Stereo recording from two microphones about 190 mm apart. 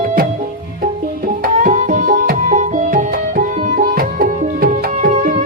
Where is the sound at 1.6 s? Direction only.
40° right (ahead or behind).